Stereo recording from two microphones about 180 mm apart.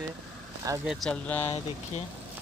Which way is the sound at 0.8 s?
5° left (ahead or behind).